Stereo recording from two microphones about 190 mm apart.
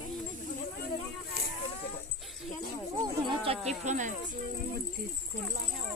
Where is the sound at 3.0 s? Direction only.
25° right (ahead or behind).